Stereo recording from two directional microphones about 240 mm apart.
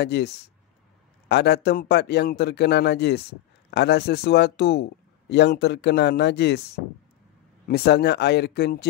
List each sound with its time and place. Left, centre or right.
0.0 s a man's voice: left
1.3 s a man's voice: left